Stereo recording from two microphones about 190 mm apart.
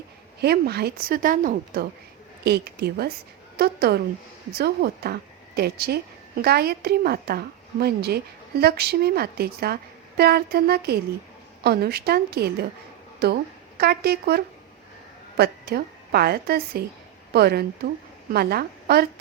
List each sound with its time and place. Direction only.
0.4 s a woman's voice: 55° right (ahead or behind)